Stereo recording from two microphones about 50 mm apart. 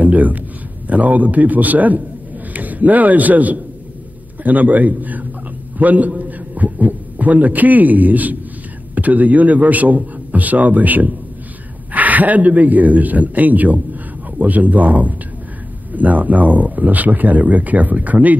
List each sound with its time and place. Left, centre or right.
0.0 s a man's voice: right